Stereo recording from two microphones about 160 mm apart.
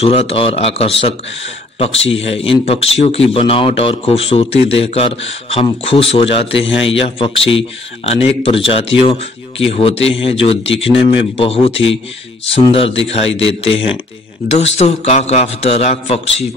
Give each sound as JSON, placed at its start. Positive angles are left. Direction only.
{"t": 0.0, "sound": "speech", "side_deg": 40}